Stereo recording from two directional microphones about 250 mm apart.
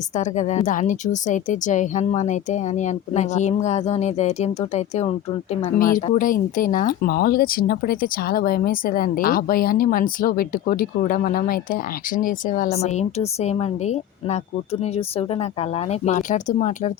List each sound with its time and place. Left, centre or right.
0.1 s a woman's voice: left